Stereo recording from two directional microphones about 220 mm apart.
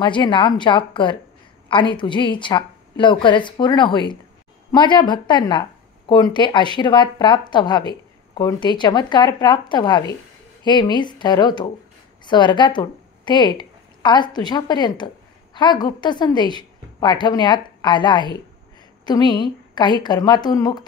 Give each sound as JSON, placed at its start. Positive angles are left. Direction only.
{"t": 0.0, "sound": "a woman's voice", "side_deg": 20}